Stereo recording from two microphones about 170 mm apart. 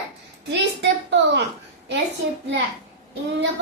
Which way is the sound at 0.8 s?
90° right.